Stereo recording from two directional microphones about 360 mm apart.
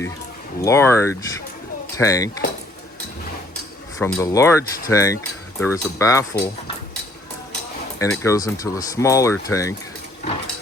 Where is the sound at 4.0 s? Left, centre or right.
Centre.